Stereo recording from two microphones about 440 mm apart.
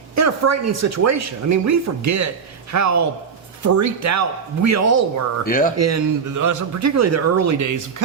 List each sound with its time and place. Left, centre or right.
0.2 s speech: right
5.5 s speech: centre
5.7 s speech: right